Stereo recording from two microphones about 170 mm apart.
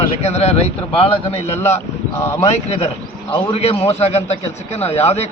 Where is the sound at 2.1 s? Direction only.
15° left (ahead or behind).